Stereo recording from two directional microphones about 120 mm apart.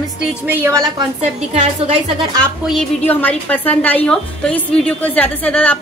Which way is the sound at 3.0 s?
15° left (ahead or behind).